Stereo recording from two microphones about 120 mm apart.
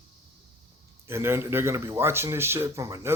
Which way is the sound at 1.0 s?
20° right (ahead or behind).